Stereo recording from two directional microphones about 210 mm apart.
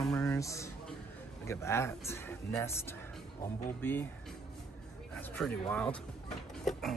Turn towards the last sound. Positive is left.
turn(degrees=0)  # may be behind; listen again after turning